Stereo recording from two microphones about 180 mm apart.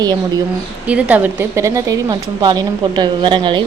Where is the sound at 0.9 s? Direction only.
10° right (ahead or behind); by 3.6 s 25° right (ahead or behind).